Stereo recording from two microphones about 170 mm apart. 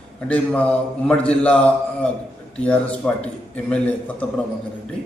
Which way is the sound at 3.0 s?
5° left (ahead or behind).